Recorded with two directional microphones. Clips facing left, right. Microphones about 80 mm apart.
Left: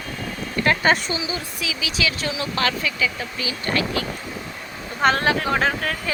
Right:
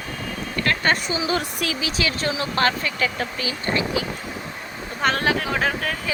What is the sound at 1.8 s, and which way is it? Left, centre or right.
Speech, right.